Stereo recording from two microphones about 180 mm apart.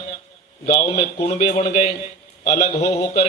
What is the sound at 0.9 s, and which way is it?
A man's voice, 40° left (ahead or behind).